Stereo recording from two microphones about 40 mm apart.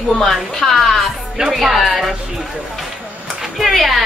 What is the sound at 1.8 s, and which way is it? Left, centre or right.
Speech, centre.